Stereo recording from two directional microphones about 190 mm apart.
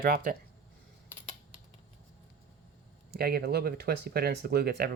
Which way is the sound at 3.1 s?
55° right (ahead or behind).